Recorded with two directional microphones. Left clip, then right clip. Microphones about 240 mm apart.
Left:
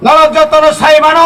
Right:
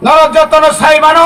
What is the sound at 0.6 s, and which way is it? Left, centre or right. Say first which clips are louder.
Speech: even; right.